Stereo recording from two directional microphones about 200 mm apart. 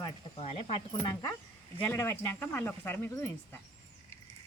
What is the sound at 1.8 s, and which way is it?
Speech, 10° left (ahead or behind).